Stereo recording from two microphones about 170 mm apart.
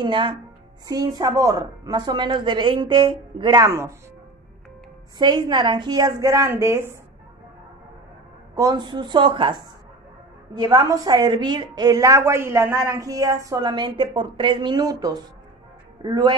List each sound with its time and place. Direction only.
0.0 s a woman's voice: 25° right (ahead or behind)
3.6 s speech: 15° right (ahead or behind)
5.2 s a woman's voice: 25° right (ahead or behind)
8.5 s a woman's voice: 25° right (ahead or behind)